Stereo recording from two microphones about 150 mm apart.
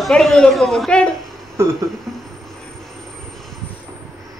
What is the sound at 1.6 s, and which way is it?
Speech, 20° right (ahead or behind).